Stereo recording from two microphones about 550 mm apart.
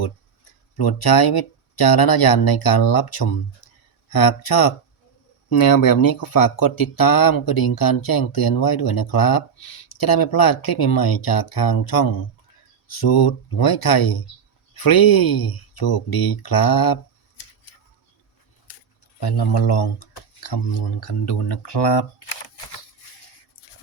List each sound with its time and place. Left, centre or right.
0.8 s speech: left
19.2 s speech: left